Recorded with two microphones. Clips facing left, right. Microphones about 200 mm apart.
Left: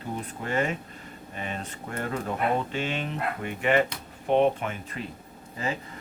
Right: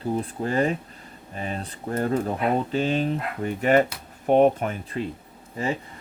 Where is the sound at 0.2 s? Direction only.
35° right (ahead or behind).